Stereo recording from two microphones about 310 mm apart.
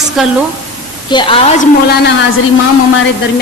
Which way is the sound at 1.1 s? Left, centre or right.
Centre.